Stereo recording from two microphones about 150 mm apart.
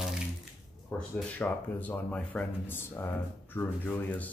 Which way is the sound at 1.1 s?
10° left (ahead or behind).